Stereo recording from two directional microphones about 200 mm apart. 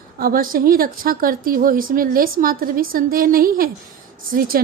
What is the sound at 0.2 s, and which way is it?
A woman's voice, 45° right (ahead or behind).